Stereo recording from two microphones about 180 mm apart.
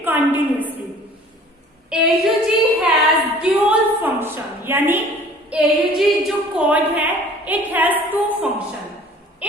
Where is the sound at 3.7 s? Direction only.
10° right (ahead or behind).